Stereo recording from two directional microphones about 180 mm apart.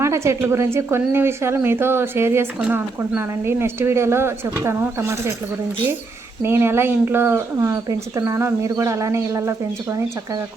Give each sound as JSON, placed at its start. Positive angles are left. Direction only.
{"t": 0.0, "sound": "a woman's voice", "side_deg": -15}
{"t": 6.4, "sound": "a woman's voice", "side_deg": -15}